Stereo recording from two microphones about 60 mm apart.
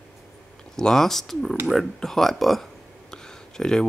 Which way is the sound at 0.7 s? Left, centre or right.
Centre.